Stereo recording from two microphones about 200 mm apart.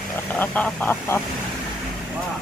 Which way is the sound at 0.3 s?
10° left (ahead or behind).